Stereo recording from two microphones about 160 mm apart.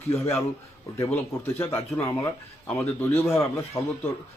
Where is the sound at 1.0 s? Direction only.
15° left (ahead or behind).